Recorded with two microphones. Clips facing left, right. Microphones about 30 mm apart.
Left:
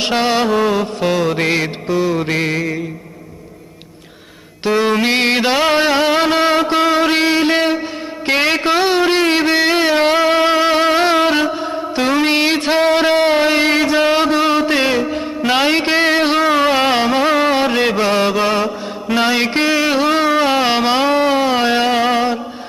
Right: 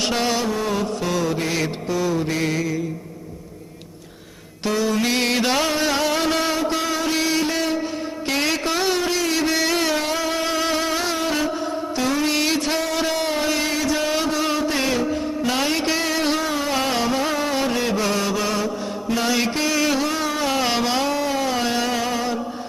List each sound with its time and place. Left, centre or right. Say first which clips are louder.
0.0 s music: left 6 dB; left
1.5 s music: left 6 dB; left
4.8 s music: left 6 dB; left
6.6 s a sound: left 9 dB; left
11.9 s music: left 7 dB; left
18.0 s mantra: left 7 dB; left